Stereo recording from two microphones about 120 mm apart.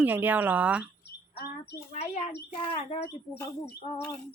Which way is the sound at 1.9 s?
60° left (ahead or behind).